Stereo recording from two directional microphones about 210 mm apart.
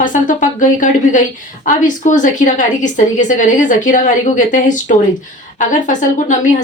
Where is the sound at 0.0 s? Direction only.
40° left (ahead or behind).